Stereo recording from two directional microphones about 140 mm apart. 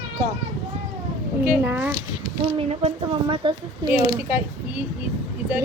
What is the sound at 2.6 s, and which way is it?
Speech, 45° right (ahead or behind).